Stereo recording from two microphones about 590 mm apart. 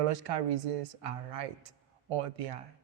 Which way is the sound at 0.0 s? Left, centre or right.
Right.